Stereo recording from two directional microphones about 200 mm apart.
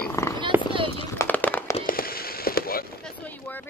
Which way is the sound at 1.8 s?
45° left (ahead or behind).